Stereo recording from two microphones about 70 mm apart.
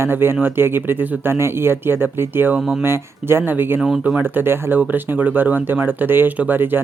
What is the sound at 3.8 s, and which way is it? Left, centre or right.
Speech, centre.